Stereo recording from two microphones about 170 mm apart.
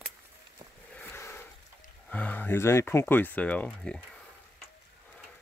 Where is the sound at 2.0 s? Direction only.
10° left (ahead or behind).